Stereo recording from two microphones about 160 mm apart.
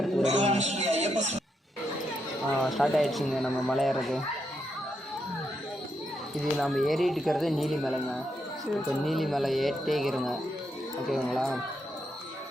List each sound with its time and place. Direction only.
0.3 s a man's voice: 45° right (ahead or behind)
2.5 s speech: centre (ahead or behind)
6.4 s speech: centre (ahead or behind)